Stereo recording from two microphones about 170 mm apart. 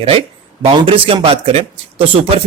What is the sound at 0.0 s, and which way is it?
Speech, 35° right (ahead or behind).